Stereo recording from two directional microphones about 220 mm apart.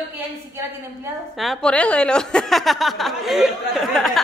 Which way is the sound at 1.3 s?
Centre (ahead or behind).